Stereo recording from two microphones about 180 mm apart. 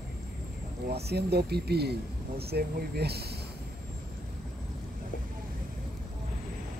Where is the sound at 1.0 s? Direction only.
65° right (ahead or behind).